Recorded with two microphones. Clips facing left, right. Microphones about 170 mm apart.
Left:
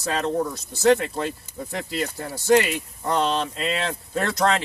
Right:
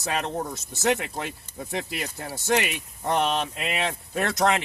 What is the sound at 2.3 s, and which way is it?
Speech, 15° right (ahead or behind).